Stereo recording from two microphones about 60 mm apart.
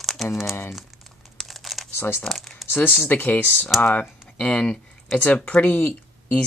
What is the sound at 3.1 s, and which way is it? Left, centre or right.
Speech, left.